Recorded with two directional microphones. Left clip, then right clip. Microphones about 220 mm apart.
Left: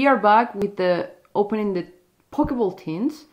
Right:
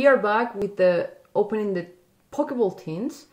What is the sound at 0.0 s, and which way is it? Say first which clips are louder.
Speech: left 3 dB; 25° left (ahead or behind).